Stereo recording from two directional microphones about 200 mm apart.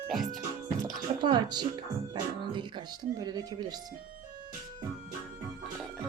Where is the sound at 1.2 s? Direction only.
20° right (ahead or behind).